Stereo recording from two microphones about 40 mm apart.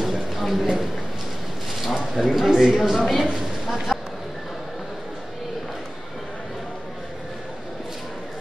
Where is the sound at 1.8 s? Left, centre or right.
Centre.